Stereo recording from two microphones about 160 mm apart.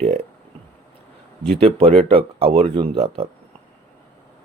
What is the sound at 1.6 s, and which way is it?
Speech, 35° right (ahead or behind).